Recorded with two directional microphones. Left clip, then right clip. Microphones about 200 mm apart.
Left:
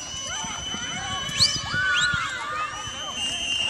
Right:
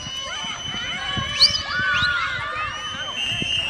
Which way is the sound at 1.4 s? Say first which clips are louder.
Right 5 dB; 90° left.